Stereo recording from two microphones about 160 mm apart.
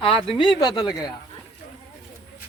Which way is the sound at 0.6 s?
25° left (ahead or behind).